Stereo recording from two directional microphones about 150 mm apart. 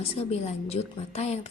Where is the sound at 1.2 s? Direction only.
45° left (ahead or behind).